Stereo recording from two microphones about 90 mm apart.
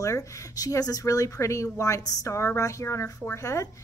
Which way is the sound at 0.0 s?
35° left (ahead or behind).